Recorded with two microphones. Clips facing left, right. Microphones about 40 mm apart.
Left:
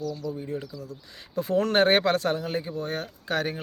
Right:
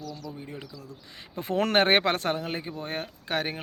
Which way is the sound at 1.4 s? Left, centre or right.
Right.